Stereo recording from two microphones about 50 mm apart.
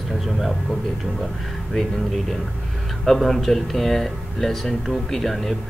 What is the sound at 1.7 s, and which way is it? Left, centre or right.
Speech, centre.